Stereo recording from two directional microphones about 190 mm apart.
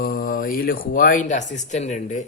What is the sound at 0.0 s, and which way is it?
A man's voice, 50° left (ahead or behind).